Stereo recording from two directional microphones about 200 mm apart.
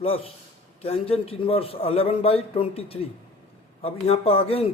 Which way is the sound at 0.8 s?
30° left (ahead or behind).